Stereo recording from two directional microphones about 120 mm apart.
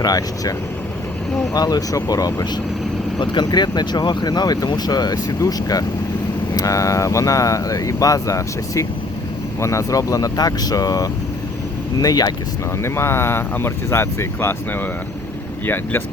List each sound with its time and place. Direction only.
0.0 s speech: 30° left (ahead or behind)
1.5 s speech: 30° left (ahead or behind)
12.8 s speech: 20° left (ahead or behind)
15.6 s speech: 15° left (ahead or behind)